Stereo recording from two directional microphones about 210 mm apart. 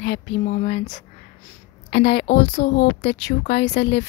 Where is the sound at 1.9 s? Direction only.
50° left (ahead or behind).